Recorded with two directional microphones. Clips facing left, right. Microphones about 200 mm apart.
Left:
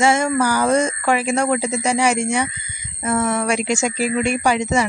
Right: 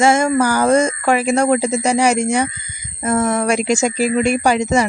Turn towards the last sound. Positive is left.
turn(degrees=-40)  # may be behind; listen again after turning